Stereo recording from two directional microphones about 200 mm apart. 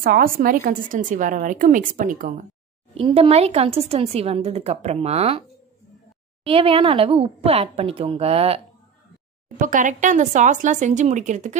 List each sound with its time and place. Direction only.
0.0 s speech: 45° right (ahead or behind)
2.9 s speech: 30° right (ahead or behind)
6.4 s speech: 30° right (ahead or behind)
9.6 s speech: 40° right (ahead or behind)